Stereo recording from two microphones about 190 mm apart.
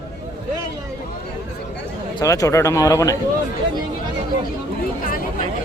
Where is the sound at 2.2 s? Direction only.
15° left (ahead or behind).